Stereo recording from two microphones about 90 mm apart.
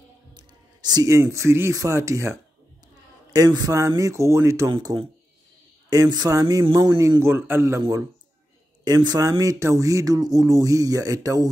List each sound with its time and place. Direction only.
0.3 s a sound: 50° right (ahead or behind)
1.0 s speech: 35° right (ahead or behind)
3.3 s speech: 45° right (ahead or behind); by 7.8 s 25° right (ahead or behind)
8.8 s speech: 45° right (ahead or behind)